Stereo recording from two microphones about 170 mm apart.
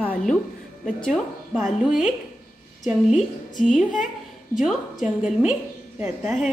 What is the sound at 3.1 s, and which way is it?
Speech, 45° left (ahead or behind).